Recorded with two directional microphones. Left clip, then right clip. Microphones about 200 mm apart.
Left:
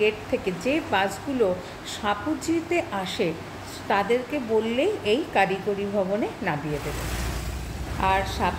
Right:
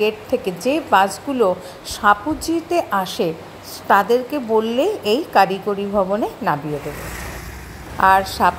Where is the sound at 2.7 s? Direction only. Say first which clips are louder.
Right 7 dB; 30° right (ahead or behind).